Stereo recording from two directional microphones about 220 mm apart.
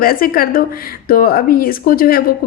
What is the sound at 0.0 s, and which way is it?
A woman's voice, 40° left (ahead or behind).